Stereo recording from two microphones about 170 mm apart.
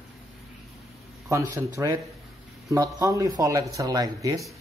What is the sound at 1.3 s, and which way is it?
Speech, 15° right (ahead or behind).